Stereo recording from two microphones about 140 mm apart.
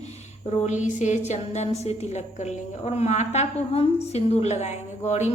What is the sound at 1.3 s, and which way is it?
A woman's voice, 55° left (ahead or behind).